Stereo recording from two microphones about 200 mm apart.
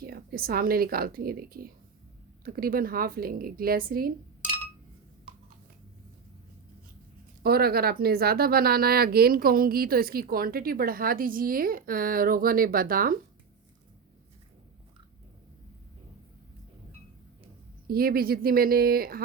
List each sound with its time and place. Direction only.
0.0 s speech: 50° right (ahead or behind)
7.4 s speech: 50° right (ahead or behind)
17.8 s speech: 50° right (ahead or behind)